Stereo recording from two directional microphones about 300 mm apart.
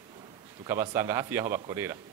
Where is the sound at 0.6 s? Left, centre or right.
Centre.